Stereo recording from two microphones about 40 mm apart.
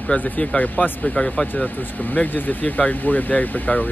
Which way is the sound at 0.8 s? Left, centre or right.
Left.